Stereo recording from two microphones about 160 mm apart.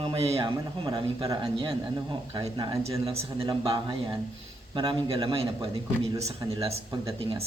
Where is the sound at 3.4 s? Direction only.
30° right (ahead or behind).